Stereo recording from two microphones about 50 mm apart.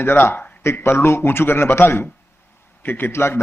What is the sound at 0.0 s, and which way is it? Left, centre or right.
Speech, left.